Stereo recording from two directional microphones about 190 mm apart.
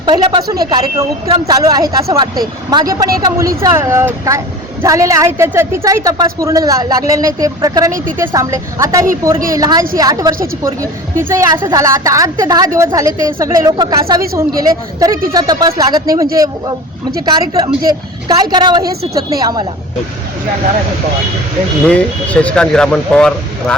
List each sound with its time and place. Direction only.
0.0 s a woman's voice: 20° right (ahead or behind)
21.8 s speech: 5° left (ahead or behind)